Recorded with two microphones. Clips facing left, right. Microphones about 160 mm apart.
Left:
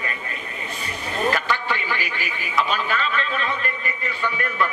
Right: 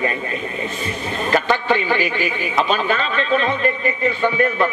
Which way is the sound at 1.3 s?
25° right (ahead or behind).